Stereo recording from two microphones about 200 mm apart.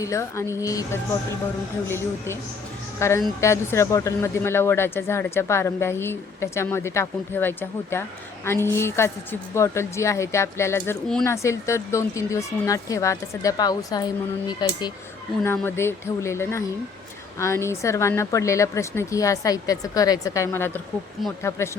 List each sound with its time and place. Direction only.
0.0 s speech: 15° left (ahead or behind)